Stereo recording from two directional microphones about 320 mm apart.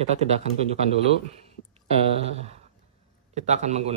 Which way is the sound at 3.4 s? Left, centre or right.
Right.